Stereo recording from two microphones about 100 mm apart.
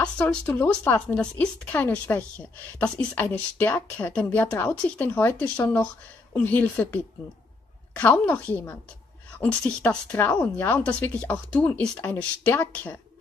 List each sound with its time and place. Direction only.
0.0 s speech: 10° left (ahead or behind)
10.1 s speech: 20° left (ahead or behind)